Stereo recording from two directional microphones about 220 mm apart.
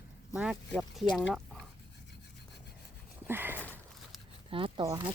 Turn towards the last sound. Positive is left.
turn(degrees=-20)  # may be behind; listen again after turning